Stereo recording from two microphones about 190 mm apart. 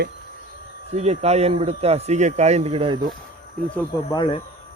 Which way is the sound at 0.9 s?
35° right (ahead or behind).